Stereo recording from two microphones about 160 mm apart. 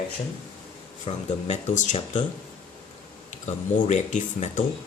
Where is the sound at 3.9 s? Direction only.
45° left (ahead or behind).